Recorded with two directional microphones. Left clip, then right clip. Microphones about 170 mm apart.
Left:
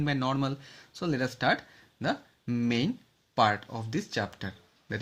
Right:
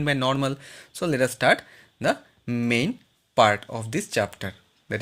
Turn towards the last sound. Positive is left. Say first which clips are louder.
# right 6 dB
turn(degrees=-45)  # may be behind; listen again after turning